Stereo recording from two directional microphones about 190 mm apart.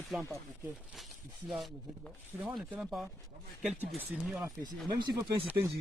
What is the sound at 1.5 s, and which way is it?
Speech, centre (ahead or behind).